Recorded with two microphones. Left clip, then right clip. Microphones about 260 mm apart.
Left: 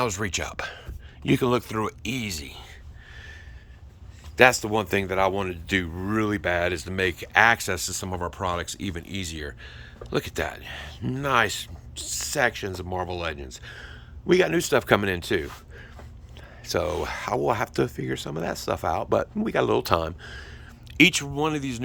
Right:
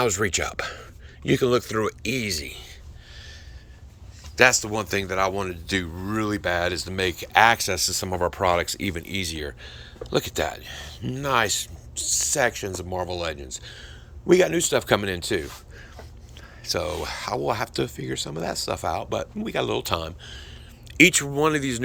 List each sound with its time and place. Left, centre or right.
0.0 s speech: centre
4.4 s speech: centre
20.9 s speech: centre